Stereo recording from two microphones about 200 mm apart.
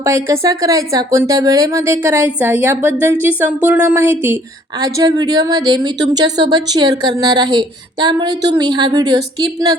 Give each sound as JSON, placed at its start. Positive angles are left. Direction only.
{"t": 0.0, "sound": "a woman's voice", "side_deg": -15}